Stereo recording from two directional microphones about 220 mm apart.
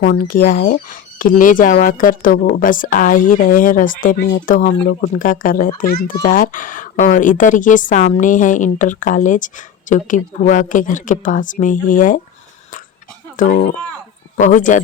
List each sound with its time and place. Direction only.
0.0 s speech: 40° left (ahead or behind)
13.3 s speech: 35° left (ahead or behind)